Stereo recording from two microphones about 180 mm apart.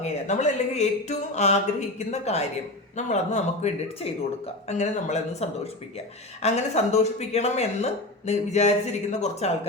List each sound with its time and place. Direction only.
0.0 s speech: 40° left (ahead or behind)